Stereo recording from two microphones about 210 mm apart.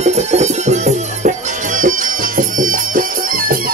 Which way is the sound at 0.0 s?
30° right (ahead or behind).